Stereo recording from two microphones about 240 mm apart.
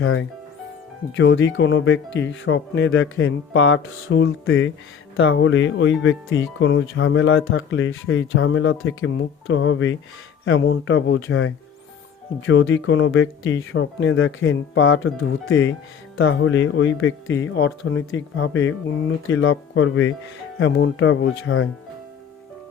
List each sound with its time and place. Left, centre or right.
0.0 s speech: left